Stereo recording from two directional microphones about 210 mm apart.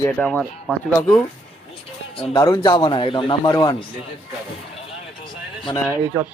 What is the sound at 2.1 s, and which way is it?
A man's voice, 25° left (ahead or behind).